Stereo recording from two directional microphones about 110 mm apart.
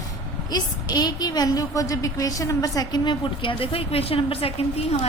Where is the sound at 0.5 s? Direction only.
40° left (ahead or behind).